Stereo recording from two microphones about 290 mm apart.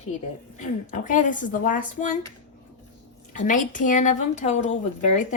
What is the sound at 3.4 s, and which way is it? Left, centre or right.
A woman's voice, left.